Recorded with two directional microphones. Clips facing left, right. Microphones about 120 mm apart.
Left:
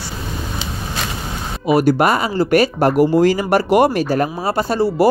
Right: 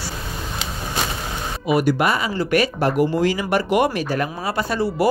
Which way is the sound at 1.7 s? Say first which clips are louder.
Left 5 dB; 40° left (ahead or behind).